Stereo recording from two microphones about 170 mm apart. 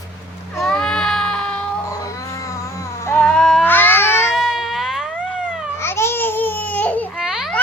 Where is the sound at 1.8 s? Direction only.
20° left (ahead or behind).